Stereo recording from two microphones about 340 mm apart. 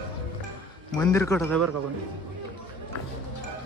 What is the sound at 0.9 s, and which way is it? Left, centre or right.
Speech, centre.